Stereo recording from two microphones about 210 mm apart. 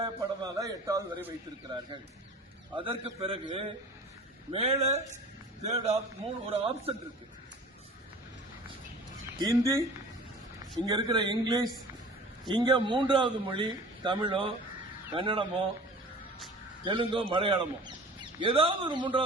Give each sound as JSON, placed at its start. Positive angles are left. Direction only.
{"t": 0.0, "sound": "a man's voice", "side_deg": -20}
{"t": 2.7, "sound": "a man's voice", "side_deg": -25}
{"t": 4.5, "sound": "a man's voice", "side_deg": -30}
{"t": 9.4, "sound": "a man's voice", "side_deg": -15}
{"t": 16.8, "sound": "a man's voice", "side_deg": -25}